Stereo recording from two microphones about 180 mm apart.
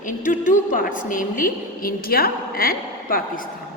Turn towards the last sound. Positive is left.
turn(degrees=55)  # may be behind; listen again after turning